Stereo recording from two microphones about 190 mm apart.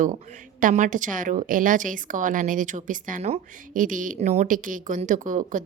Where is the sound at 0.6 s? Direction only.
45° right (ahead or behind).